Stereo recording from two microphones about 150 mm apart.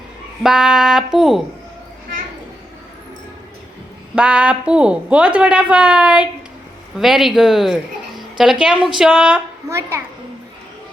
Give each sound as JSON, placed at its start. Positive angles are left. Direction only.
{"t": 0.4, "sound": "speech", "side_deg": -5}
{"t": 4.1, "sound": "a woman's voice", "side_deg": -10}
{"t": 9.6, "sound": "a child's voice", "side_deg": -20}